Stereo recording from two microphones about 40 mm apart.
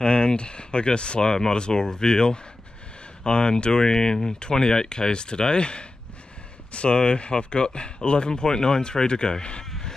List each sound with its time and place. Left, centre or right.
0.0 s speech: left
9.7 s cat: centre